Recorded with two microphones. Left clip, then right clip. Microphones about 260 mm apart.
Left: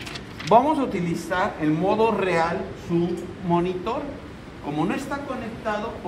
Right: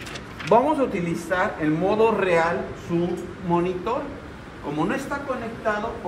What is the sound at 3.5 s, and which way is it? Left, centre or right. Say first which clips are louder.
Speech: even; centre.